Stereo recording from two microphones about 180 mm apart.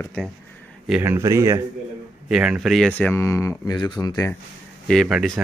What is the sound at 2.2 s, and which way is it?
Speech, 5° right (ahead or behind).